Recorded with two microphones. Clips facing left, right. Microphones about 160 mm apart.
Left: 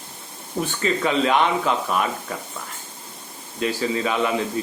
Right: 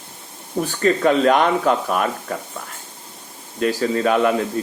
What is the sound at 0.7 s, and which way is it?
Speech, 50° right (ahead or behind).